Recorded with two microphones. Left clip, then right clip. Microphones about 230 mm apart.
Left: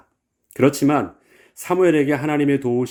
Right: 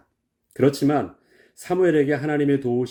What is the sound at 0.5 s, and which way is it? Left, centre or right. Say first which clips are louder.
Speech: left 3 dB; centre.